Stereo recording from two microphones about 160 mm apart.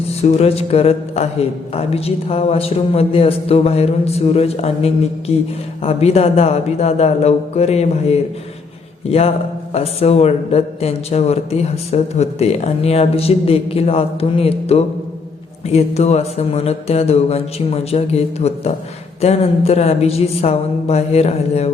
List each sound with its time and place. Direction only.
0.1 s a man's voice: 40° left (ahead or behind)